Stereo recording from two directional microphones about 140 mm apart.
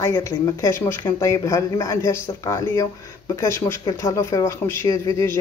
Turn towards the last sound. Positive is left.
turn(degrees=20)  # may be behind; listen again after turning